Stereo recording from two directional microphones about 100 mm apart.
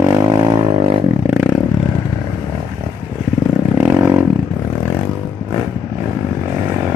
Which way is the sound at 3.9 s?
25° right (ahead or behind).